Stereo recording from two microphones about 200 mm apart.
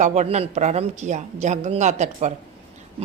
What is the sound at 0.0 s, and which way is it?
A woman's voice, 35° right (ahead or behind).